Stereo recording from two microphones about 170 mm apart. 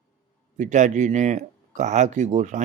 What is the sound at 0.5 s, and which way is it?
Speech, 45° right (ahead or behind).